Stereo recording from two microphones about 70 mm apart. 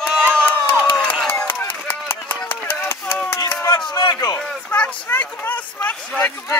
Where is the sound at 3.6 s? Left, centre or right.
Left.